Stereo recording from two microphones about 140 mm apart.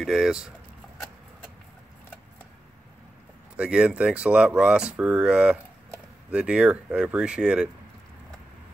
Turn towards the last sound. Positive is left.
turn(degrees=-5)  # may be behind; listen again after turning